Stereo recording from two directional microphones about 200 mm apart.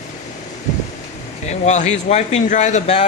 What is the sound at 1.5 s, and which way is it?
Speech, 35° left (ahead or behind).